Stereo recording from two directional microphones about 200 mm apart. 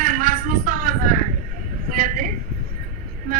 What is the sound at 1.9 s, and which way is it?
Vehicle, 40° right (ahead or behind).